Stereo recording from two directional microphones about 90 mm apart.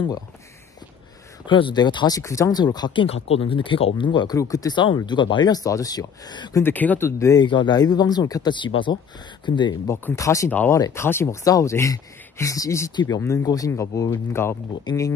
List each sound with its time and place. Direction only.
1.5 s speech: 60° left (ahead or behind)
2.1 s speech: 35° left (ahead or behind)
2.6 s speech: 50° left (ahead or behind)
4.4 s speech: 40° left (ahead or behind)
4.7 s speech: 60° left (ahead or behind)
6.5 s speech: 20° left (ahead or behind)
7.1 s speech: 30° left (ahead or behind)
7.3 s speech: 60° left (ahead or behind)
9.8 s speech: 25° left (ahead or behind)
10.1 s speech: 35° left (ahead or behind)
11.4 s speech: 40° left (ahead or behind)
12.9 s speech: 50° left (ahead or behind); by 14.6 s 25° left (ahead or behind)
14.9 s speech: 55° left (ahead or behind)